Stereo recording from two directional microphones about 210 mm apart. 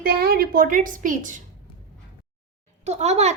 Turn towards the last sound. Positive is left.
turn(degrees=-30)  # may be behind; listen again after turning